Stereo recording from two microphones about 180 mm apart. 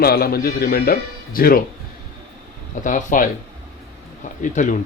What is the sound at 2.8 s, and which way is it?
Speech, 45° left (ahead or behind).